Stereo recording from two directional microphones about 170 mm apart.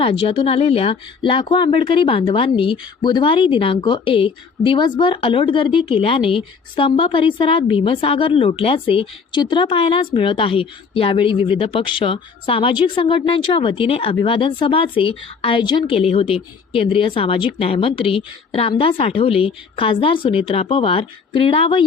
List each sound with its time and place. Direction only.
0.0 s a woman's voice: 30° left (ahead or behind)